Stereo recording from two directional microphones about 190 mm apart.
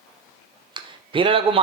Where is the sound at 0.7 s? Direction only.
25° right (ahead or behind).